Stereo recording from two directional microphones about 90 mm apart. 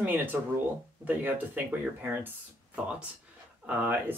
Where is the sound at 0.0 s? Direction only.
20° right (ahead or behind).